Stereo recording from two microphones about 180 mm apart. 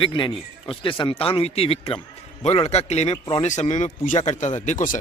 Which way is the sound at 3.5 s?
40° left (ahead or behind).